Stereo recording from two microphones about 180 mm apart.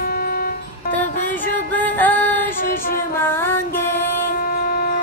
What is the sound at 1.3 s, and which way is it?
Music, 10° left (ahead or behind).